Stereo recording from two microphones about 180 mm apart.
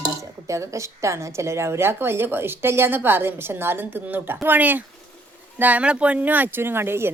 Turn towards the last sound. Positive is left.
turn(degrees=-15)  # may be behind; listen again after turning